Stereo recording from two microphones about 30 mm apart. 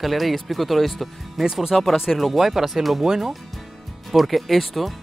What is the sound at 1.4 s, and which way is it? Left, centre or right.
Speech, right.